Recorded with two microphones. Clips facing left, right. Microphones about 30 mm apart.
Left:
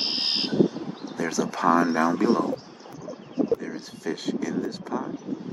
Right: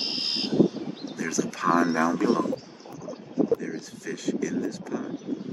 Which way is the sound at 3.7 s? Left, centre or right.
Left.